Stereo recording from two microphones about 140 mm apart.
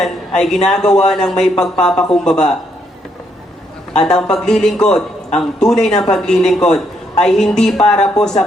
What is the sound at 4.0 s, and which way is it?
A woman's voice, 5° left (ahead or behind).